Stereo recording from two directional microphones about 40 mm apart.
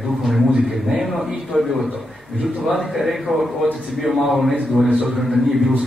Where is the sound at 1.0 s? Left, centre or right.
Centre.